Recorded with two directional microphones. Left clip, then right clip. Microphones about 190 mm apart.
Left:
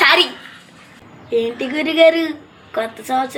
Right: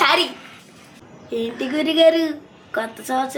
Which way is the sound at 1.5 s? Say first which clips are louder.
Left 1 dB; 20° right (ahead or behind).